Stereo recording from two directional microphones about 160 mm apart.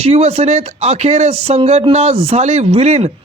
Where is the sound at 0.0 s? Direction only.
40° right (ahead or behind).